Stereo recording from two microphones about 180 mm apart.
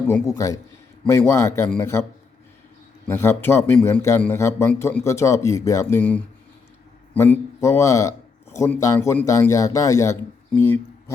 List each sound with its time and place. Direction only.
0.1 s a man's voice: 15° left (ahead or behind)
3.1 s a man's voice: 15° left (ahead or behind)